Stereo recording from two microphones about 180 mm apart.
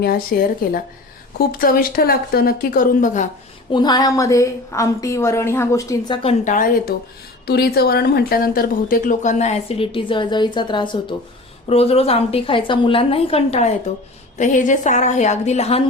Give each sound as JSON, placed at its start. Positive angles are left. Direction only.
{"t": 0.0, "sound": "speech", "side_deg": 55}
{"t": 3.7, "sound": "a woman's voice", "side_deg": 25}
{"t": 6.2, "sound": "speech", "side_deg": 45}
{"t": 7.4, "sound": "a woman's voice", "side_deg": 60}